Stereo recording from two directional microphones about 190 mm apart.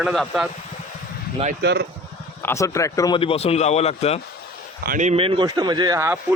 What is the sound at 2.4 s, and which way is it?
Speech, 15° left (ahead or behind).